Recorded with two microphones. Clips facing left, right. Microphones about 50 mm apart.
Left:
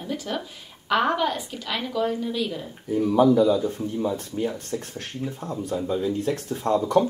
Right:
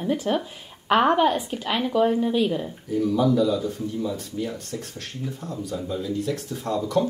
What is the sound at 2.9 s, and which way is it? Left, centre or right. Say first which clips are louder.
Speech: left 3 dB; left.